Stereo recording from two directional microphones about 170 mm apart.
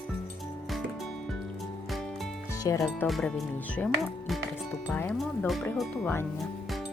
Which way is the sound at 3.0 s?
Centre (ahead or behind).